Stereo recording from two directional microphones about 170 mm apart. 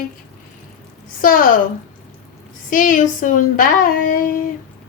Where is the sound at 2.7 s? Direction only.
50° left (ahead or behind).